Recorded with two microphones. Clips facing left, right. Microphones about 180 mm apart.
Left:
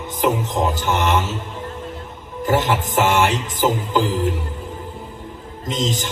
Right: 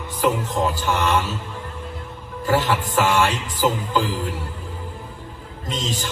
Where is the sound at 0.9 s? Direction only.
20° left (ahead or behind).